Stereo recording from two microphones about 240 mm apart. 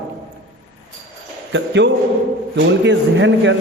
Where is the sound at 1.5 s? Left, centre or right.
Right.